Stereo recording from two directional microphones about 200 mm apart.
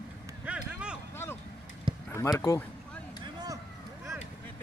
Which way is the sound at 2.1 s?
15° left (ahead or behind).